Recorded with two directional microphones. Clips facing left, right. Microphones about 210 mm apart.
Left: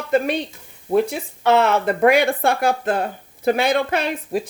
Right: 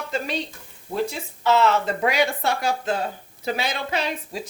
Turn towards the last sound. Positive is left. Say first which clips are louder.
# left 5 dB
turn(degrees=55)  # may be behind; listen again after turning